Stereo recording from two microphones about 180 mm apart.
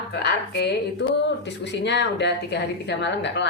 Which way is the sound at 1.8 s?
75° left (ahead or behind).